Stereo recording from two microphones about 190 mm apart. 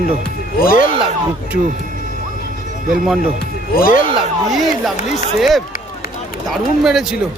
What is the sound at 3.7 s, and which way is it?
Speech, 50° left (ahead or behind).